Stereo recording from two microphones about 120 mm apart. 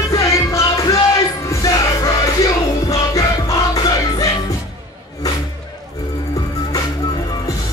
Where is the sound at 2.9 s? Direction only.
30° left (ahead or behind).